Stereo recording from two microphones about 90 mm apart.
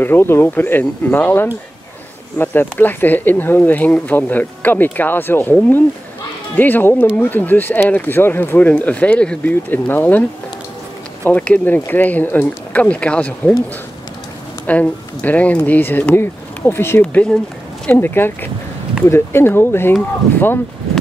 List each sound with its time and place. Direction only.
0.0 s speech: 25° left (ahead or behind)
11.2 s speech: 15° left (ahead or behind)
14.7 s speech: 15° left (ahead or behind)
17.0 s speech: 15° left (ahead or behind)
17.9 s speech: 25° left (ahead or behind)